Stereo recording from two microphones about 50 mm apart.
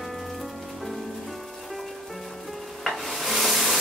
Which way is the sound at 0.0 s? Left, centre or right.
Centre.